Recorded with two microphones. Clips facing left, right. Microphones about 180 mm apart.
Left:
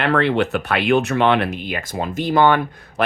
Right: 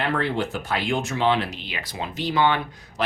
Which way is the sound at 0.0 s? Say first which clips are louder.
Left 7 dB; 70° left (ahead or behind).